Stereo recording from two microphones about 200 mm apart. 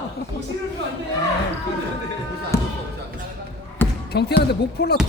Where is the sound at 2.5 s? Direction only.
15° left (ahead or behind).